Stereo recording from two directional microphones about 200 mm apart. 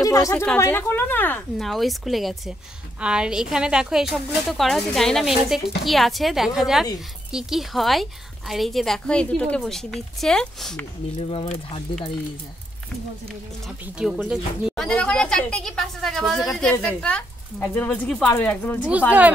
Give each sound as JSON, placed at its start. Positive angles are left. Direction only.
{"t": 0.0, "sound": "a sound", "side_deg": 15}
{"t": 0.3, "sound": "a woman's voice", "side_deg": 10}
{"t": 11.1, "sound": "speech", "side_deg": 30}
{"t": 13.9, "sound": "a woman's voice", "side_deg": -5}
{"t": 18.9, "sound": "speech", "side_deg": -5}